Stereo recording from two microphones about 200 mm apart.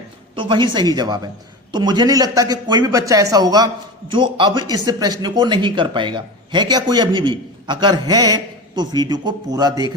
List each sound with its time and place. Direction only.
0.3 s speech: 25° right (ahead or behind)